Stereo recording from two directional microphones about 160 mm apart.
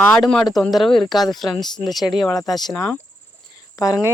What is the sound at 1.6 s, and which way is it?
Speech, 25° left (ahead or behind).